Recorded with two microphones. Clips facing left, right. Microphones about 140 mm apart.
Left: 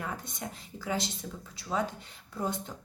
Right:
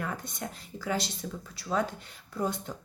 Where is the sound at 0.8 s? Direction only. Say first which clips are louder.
Right 2 dB; 20° left (ahead or behind).